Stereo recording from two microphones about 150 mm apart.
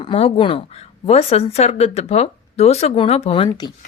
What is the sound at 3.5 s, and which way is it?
Speech, 25° left (ahead or behind).